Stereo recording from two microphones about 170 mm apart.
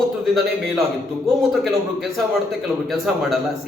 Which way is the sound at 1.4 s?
Centre (ahead or behind).